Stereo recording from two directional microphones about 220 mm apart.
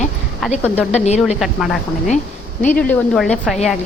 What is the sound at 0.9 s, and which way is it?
Speech, 30° left (ahead or behind).